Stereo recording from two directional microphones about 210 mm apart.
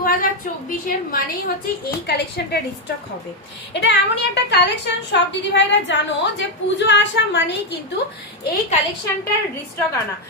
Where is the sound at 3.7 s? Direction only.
60° left (ahead or behind).